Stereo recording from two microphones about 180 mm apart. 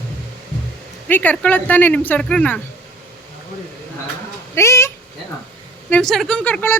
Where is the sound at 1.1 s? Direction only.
10° left (ahead or behind).